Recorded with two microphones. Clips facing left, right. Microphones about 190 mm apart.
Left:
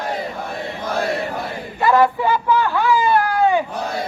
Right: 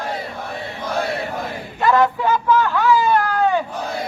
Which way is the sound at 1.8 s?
10° left (ahead or behind).